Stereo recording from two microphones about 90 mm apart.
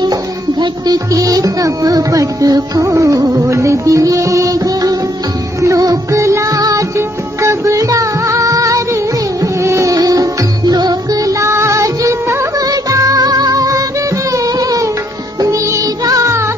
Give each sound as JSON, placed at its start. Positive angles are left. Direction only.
{"t": 0.0, "sound": "music", "side_deg": -50}